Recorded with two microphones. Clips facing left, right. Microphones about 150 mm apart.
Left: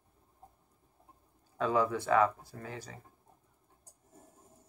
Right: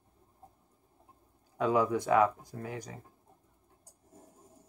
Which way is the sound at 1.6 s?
15° right (ahead or behind).